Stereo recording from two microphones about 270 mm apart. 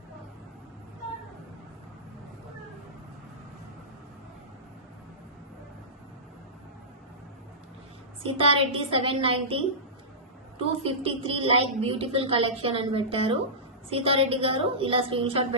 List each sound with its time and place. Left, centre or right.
8.2 s a woman's voice: right
10.6 s a woman's voice: right